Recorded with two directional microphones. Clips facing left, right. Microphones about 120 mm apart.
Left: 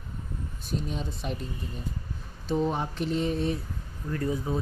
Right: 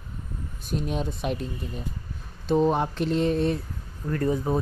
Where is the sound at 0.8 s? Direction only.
65° right (ahead or behind).